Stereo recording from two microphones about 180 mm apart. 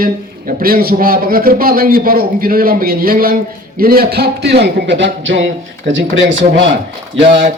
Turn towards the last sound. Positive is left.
turn(degrees=-90)